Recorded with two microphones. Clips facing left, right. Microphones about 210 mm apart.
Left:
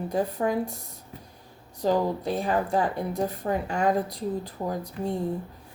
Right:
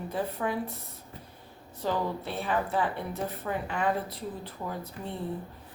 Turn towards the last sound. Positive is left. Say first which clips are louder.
# left 7 dB
turn(degrees=40)  # may be behind; listen again after turning